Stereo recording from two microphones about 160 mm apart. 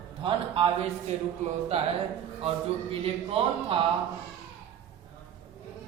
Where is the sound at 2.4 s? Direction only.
35° right (ahead or behind).